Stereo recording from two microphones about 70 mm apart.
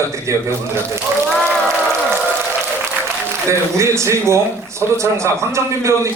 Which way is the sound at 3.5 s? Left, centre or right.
Right.